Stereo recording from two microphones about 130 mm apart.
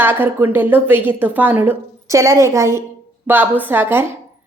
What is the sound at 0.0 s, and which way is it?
A woman's voice, 15° right (ahead or behind).